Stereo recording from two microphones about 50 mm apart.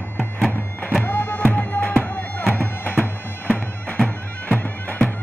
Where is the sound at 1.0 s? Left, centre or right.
Left.